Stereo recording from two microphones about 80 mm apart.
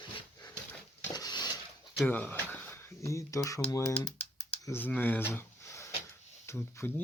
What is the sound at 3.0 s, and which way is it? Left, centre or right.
Speech, left.